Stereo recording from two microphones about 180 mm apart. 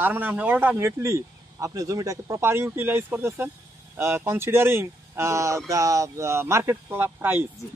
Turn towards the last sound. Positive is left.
turn(degrees=-10)  # may be behind; listen again after turning